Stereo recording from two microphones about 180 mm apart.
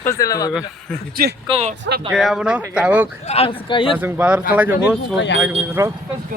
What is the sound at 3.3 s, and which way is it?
Speech, 30° left (ahead or behind).